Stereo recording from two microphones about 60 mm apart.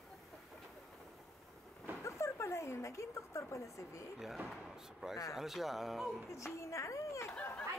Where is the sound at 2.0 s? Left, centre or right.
Left.